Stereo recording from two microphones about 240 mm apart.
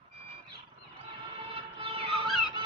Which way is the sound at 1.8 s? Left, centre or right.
Right.